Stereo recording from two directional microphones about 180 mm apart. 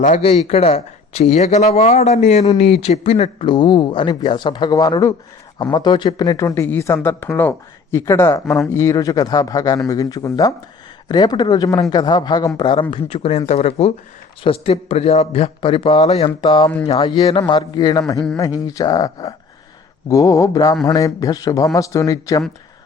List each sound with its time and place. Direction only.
0.0 s speech: 40° left (ahead or behind); by 22.4 s 20° left (ahead or behind)